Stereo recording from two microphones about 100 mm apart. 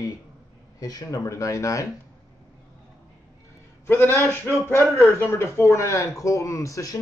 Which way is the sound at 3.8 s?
25° left (ahead or behind).